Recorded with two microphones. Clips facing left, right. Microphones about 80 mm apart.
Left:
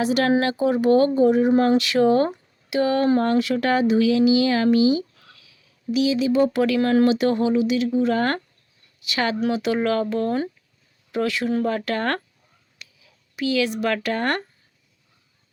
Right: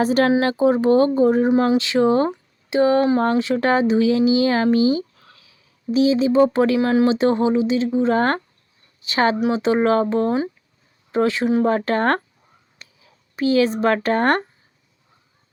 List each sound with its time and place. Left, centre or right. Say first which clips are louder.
0.0 s speech: right 3 dB; right